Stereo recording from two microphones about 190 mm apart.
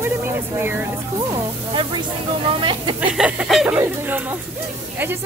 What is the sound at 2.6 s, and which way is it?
Speech, 25° right (ahead or behind).